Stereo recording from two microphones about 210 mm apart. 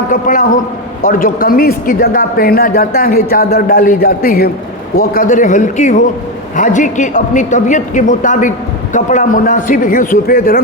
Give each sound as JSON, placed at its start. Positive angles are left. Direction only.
{"t": 0.1, "sound": "a woman's voice", "side_deg": 40}